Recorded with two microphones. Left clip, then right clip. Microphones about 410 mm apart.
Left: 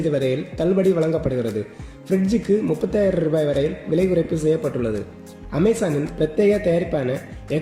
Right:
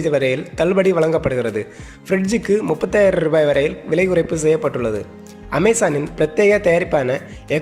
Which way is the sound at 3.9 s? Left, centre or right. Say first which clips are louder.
Right 3 dB; centre.